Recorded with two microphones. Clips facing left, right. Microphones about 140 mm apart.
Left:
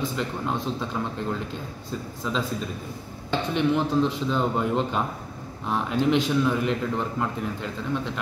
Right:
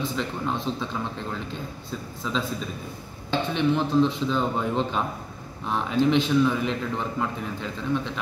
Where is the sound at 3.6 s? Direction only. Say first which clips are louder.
Right 1 dB; 10° left (ahead or behind).